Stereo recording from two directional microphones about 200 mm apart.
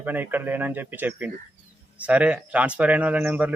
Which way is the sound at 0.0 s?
10° right (ahead or behind).